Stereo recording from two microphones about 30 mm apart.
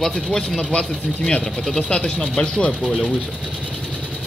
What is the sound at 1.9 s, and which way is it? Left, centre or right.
Speech, left.